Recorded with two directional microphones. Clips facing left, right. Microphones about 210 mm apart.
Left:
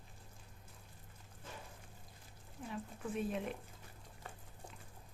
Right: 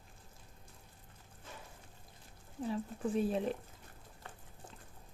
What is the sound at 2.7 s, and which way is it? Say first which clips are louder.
Speech: right 6 dB; 30° right (ahead or behind).